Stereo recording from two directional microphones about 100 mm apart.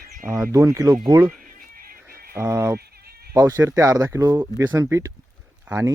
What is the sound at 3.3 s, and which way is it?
Speech, 30° right (ahead or behind).